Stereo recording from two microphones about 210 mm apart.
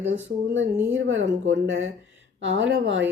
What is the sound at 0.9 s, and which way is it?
Speech, 65° right (ahead or behind).